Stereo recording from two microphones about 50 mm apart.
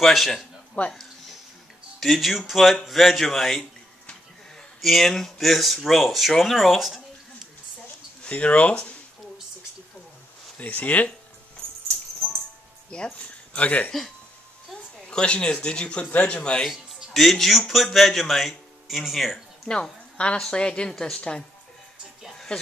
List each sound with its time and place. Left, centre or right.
0.0 s speech: centre
0.8 s speech: left
2.0 s speech: centre
4.8 s speech: centre
8.2 s speech: left
10.6 s speech: left
12.9 s speech: centre
15.0 s speech: left
17.1 s speech: centre
19.7 s a woman's voice: centre
22.5 s speech: centre